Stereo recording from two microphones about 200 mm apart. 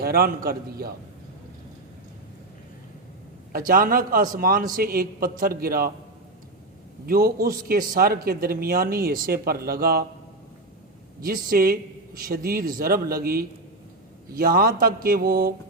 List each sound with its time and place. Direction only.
0.0 s a man's voice: 50° right (ahead or behind)
3.7 s a man's voice: 45° right (ahead or behind)
7.0 s a man's voice: 50° right (ahead or behind)
11.4 s a man's voice: 50° right (ahead or behind)